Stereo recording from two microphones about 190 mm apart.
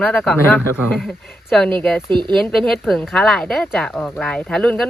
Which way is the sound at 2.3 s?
Centre (ahead or behind).